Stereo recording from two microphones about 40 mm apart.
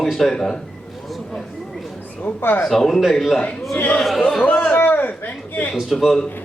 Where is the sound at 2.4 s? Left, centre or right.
Left.